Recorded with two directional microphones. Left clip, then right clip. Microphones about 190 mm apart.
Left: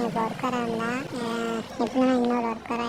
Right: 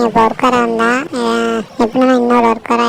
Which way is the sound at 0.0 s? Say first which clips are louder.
Right 16 dB; 50° right (ahead or behind).